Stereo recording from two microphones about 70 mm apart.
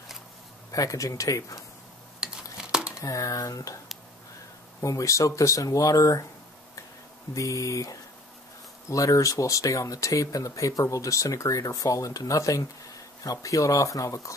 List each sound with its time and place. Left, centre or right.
0.7 s speech: left
2.1 s a sound: centre
3.0 s speech: left
4.8 s speech: left
7.3 s speech: left